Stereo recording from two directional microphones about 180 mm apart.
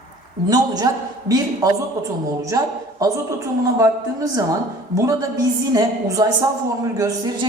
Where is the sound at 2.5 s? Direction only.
20° right (ahead or behind).